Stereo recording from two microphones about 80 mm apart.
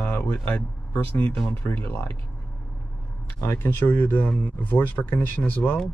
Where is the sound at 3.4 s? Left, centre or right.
Left.